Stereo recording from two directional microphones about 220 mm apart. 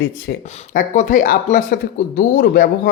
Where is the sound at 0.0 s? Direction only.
40° left (ahead or behind).